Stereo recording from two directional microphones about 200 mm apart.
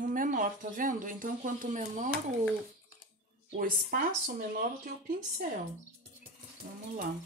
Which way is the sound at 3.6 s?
45° right (ahead or behind).